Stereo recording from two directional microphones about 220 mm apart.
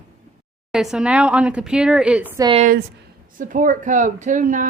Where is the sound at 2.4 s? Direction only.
25° right (ahead or behind).